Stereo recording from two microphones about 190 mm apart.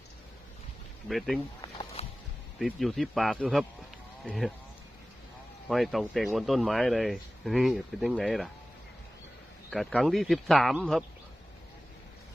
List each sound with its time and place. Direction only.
1.0 s speech: centre (ahead or behind)
1.6 s a sound: 25° left (ahead or behind)
2.6 s speech: centre (ahead or behind)
5.6 s speech: centre (ahead or behind)
9.6 s speech: 5° left (ahead or behind)